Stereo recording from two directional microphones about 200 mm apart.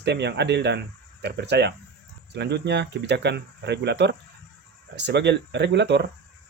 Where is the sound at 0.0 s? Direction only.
60° right (ahead or behind).